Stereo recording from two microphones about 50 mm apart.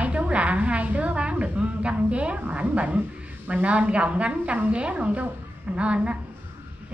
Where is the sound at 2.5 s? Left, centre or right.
Right.